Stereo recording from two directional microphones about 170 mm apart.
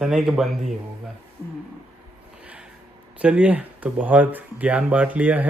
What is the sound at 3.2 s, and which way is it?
Speech, 10° right (ahead or behind).